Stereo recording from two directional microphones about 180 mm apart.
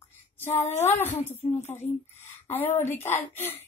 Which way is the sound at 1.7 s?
10° left (ahead or behind).